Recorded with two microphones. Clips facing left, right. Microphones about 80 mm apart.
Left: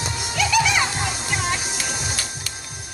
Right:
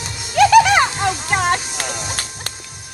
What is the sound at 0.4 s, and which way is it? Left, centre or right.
Music, right.